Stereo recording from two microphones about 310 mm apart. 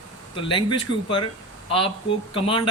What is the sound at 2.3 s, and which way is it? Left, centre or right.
Speech, centre.